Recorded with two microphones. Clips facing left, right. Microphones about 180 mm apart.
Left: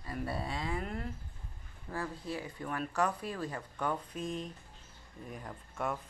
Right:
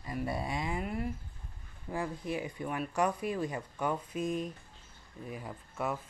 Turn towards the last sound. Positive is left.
turn(degrees=-5)  # may be behind; listen again after turning